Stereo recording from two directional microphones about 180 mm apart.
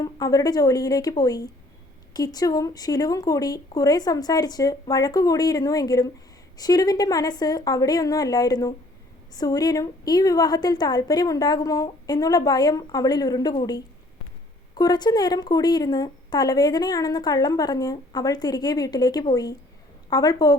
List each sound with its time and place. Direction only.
0.0 s speech: 20° left (ahead or behind)